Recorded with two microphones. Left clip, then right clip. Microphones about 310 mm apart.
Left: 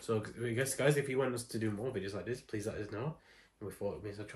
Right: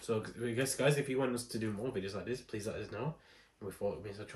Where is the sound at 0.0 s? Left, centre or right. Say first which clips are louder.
Even; centre.